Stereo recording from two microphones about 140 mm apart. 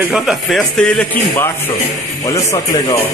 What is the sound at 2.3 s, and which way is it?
Speech, 25° left (ahead or behind).